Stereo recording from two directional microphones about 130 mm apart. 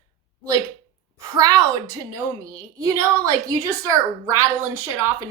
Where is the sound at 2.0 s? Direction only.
25° right (ahead or behind).